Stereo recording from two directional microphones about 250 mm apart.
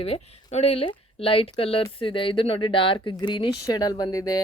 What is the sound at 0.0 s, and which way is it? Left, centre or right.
Speech, left.